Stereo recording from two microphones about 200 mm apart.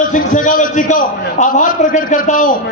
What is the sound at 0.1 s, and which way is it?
A man's voice, 40° left (ahead or behind).